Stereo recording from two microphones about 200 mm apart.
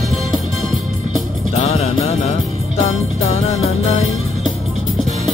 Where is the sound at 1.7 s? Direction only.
30° left (ahead or behind).